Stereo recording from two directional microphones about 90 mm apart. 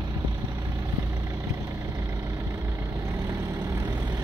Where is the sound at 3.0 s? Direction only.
35° right (ahead or behind).